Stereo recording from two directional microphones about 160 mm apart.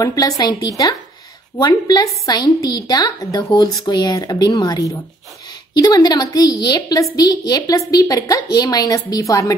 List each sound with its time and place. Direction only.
0.0 s a woman's voice: 25° left (ahead or behind)